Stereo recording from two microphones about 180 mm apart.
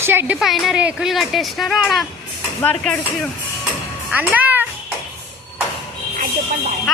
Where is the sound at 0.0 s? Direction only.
10° right (ahead or behind); by 3.2 s 5° left (ahead or behind).